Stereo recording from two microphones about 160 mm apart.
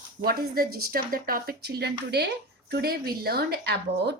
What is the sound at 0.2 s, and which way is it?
Speech, 70° right (ahead or behind).